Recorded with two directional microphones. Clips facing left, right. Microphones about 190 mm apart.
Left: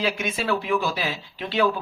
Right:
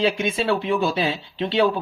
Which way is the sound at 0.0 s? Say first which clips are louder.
Right 5 dB; 25° right (ahead or behind).